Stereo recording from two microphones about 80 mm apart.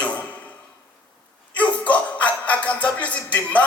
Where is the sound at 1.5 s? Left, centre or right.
Centre.